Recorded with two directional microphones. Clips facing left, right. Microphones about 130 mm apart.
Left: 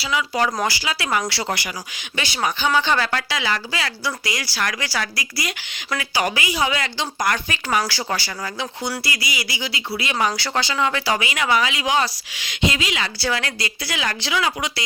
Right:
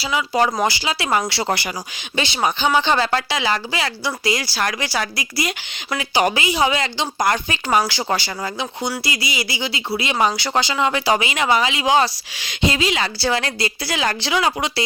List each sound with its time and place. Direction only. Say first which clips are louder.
0.0 s speech: right 3 dB; 25° right (ahead or behind)